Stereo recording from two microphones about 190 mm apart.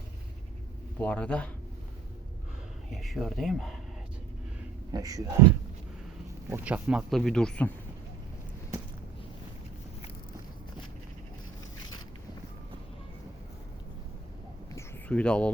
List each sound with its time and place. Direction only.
0.9 s speech: 5° left (ahead or behind)
2.9 s speech: centre (ahead or behind)
4.9 s speech: 20° right (ahead or behind); by 7.7 s 5° left (ahead or behind)
14.8 s a sound: 5° left (ahead or behind)